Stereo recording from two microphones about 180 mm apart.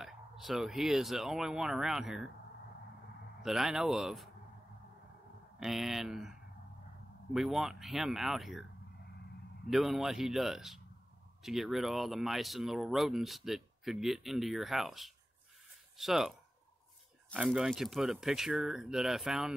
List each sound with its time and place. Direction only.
0.0 s speech: centre (ahead or behind)
3.4 s speech: centre (ahead or behind)
5.6 s speech: centre (ahead or behind)
7.3 s speech: centre (ahead or behind)
9.7 s speech: centre (ahead or behind)